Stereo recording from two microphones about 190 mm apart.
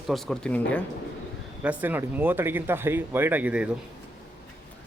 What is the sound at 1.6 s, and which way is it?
Speech, 10° right (ahead or behind).